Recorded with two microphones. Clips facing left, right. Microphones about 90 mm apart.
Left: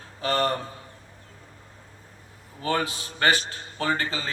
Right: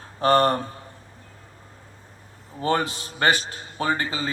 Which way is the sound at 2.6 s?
30° right (ahead or behind).